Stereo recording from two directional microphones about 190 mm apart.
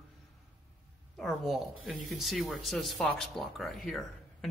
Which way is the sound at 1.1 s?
Centre (ahead or behind).